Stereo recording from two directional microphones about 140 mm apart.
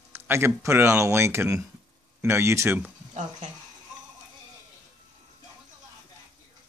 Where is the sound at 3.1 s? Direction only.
55° right (ahead or behind).